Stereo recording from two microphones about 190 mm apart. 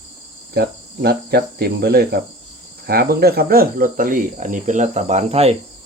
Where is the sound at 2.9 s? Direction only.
55° right (ahead or behind); by 5.5 s 30° right (ahead or behind).